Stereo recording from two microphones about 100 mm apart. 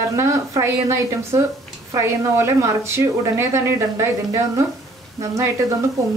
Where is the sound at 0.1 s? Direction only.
30° right (ahead or behind).